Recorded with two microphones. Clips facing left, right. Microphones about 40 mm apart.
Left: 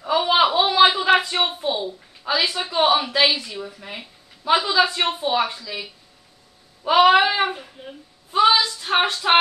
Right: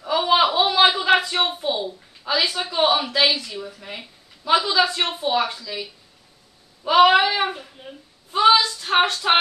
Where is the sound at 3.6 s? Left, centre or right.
Centre.